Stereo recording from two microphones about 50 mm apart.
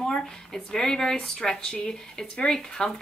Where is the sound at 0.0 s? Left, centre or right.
Centre.